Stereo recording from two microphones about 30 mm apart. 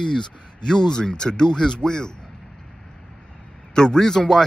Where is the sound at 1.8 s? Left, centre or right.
Left.